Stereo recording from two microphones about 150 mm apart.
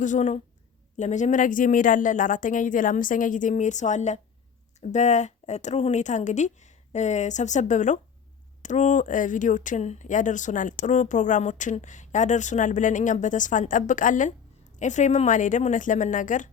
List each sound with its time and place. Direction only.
0.0 s speech: 55° left (ahead or behind)